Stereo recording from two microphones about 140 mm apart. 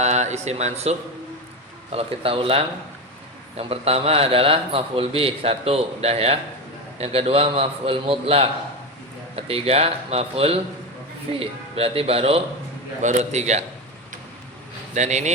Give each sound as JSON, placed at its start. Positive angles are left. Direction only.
{"t": 0.0, "sound": "a man's voice", "side_deg": -55}
{"t": 13.0, "sound": "a man's voice", "side_deg": -55}
{"t": 14.9, "sound": "a man's voice", "side_deg": -55}